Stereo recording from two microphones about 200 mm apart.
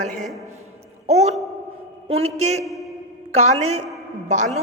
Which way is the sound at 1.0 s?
35° right (ahead or behind).